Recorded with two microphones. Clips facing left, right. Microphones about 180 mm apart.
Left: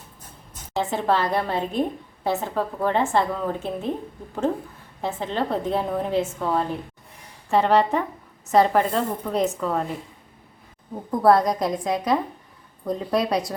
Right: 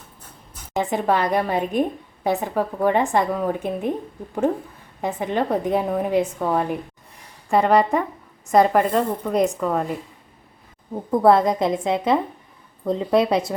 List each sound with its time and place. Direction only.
0.7 s a woman's voice: 15° right (ahead or behind)
5.0 s a woman's voice: 15° right (ahead or behind)
11.2 s a woman's voice: 25° right (ahead or behind)